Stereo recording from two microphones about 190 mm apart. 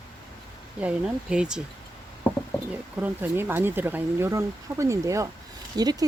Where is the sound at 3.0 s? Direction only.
10° right (ahead or behind).